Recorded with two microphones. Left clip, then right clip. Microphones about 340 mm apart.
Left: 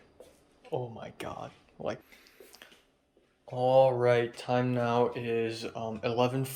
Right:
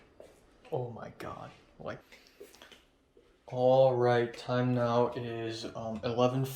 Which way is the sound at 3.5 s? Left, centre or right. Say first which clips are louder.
Left 1 dB; centre.